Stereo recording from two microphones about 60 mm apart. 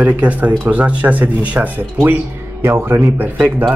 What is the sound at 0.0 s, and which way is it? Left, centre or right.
Speech, right.